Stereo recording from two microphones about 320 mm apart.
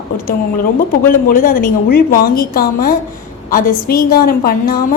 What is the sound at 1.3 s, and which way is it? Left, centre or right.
A woman's voice, left.